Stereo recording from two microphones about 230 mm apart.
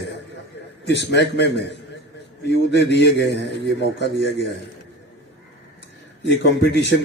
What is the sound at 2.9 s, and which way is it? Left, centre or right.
Speech, left.